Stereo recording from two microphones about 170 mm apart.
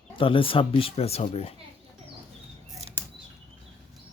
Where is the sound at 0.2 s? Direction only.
30° left (ahead or behind).